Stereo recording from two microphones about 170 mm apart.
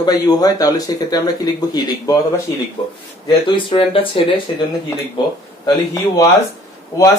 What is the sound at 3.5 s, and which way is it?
Speech, 30° left (ahead or behind).